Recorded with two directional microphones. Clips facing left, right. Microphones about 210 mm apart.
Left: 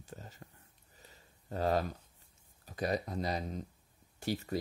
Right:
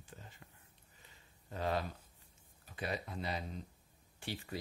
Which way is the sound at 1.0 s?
40° left (ahead or behind).